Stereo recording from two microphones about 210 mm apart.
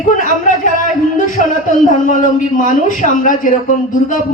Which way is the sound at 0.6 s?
40° left (ahead or behind).